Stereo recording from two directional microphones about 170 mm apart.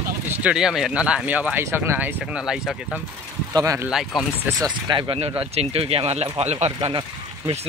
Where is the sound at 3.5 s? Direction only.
20° right (ahead or behind).